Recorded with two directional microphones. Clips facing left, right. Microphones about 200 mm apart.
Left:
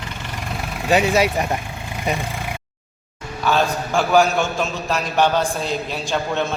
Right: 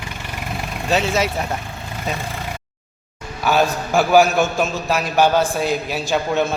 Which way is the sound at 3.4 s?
10° right (ahead or behind).